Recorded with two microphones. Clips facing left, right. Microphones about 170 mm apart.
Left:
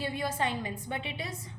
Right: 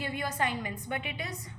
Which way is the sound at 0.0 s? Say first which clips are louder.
Left 1 dB; 30° left (ahead or behind).